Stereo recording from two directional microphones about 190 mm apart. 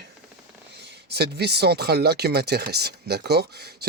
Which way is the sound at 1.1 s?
60° right (ahead or behind).